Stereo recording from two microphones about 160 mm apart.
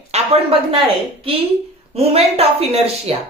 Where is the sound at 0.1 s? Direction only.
40° right (ahead or behind).